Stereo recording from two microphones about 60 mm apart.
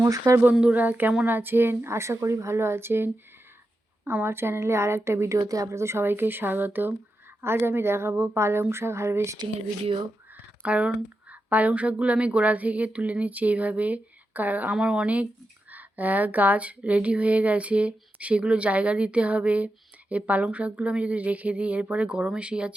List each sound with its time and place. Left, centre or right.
0.0 s speech: right
0.7 s speech: right
10.6 s speech: right